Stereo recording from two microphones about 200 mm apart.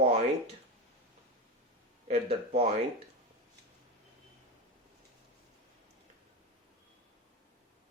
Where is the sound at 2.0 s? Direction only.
30° right (ahead or behind).